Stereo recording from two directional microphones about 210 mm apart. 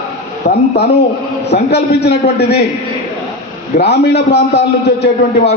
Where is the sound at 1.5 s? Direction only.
50° left (ahead or behind).